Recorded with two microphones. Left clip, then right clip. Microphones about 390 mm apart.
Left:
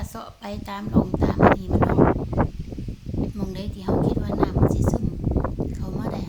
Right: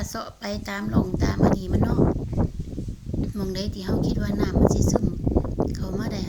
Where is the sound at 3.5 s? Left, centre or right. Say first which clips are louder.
Right 4 dB; centre.